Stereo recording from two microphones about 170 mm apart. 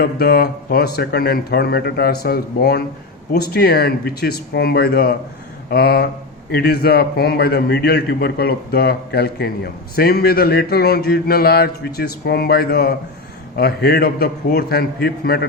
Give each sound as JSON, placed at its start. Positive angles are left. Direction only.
{"t": 0.0, "sound": "speech", "side_deg": 65}